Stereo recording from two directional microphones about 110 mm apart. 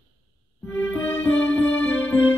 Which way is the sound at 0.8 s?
20° left (ahead or behind).